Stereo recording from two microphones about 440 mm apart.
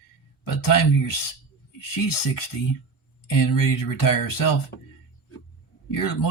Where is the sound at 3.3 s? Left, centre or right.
Left.